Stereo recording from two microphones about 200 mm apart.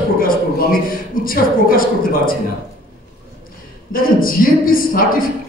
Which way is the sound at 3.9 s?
45° left (ahead or behind).